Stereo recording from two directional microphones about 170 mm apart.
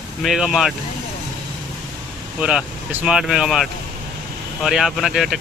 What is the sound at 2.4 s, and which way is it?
Speech, 5° right (ahead or behind).